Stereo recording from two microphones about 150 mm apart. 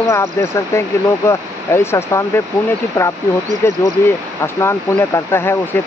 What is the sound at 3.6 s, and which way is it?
Speech, 15° left (ahead or behind).